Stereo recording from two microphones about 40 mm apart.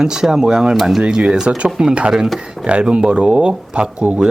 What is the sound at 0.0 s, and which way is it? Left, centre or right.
Speech, centre.